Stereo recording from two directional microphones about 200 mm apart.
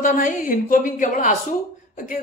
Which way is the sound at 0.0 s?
40° left (ahead or behind).